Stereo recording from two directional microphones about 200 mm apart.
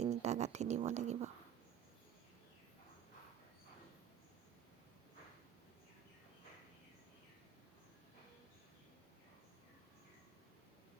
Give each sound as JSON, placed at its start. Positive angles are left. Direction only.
{"t": 0.0, "sound": "speech", "side_deg": -35}